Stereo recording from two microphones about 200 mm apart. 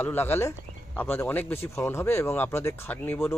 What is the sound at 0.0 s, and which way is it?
Speech, 10° left (ahead or behind).